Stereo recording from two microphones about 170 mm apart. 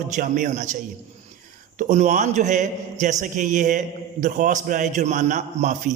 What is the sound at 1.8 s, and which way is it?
A man's voice, 45° right (ahead or behind).